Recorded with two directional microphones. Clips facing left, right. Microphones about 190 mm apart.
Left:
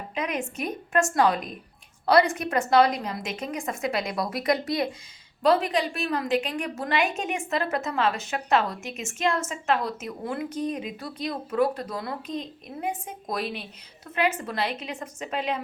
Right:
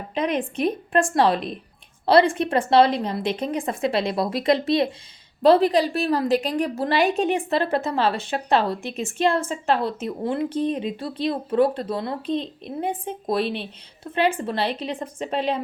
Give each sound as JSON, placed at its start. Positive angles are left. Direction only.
{"t": 0.1, "sound": "a woman's voice", "side_deg": -30}